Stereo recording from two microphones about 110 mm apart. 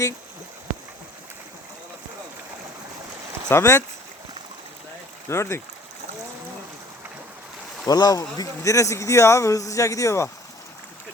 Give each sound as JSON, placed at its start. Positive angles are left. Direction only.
{"t": 3.5, "sound": "speech", "side_deg": 25}
{"t": 5.3, "sound": "speech", "side_deg": 25}
{"t": 7.9, "sound": "speech", "side_deg": 35}